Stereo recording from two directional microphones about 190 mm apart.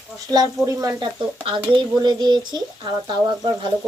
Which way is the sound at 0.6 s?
15° right (ahead or behind).